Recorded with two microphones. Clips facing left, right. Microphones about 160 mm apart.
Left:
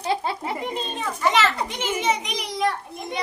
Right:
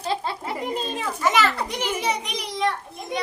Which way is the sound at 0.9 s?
5° right (ahead or behind).